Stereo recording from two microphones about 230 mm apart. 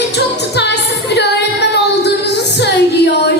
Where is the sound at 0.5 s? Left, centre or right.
Left.